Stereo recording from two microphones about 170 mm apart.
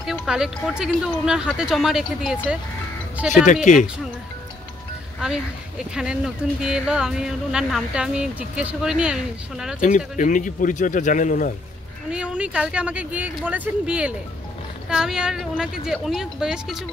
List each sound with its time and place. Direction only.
0.0 s speech: centre (ahead or behind)
5.9 s speech: 5° right (ahead or behind)
9.8 s speech: 50° left (ahead or behind)
12.1 s speech: 5° right (ahead or behind)